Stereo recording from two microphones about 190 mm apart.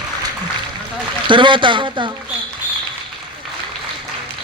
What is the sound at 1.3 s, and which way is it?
Speech, 25° right (ahead or behind).